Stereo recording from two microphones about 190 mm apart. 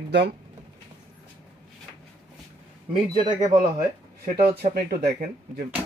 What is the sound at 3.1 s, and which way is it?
Speech, 25° right (ahead or behind).